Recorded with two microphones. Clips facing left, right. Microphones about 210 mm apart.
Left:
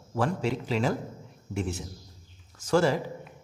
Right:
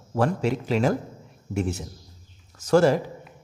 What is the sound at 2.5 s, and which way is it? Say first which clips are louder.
Speech: right 5 dB; 40° right (ahead or behind).